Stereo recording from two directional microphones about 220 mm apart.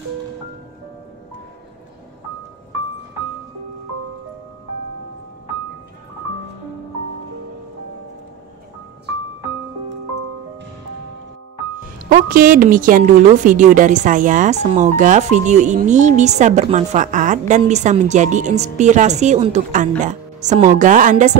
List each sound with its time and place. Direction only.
12.1 s a woman's voice: 40° right (ahead or behind)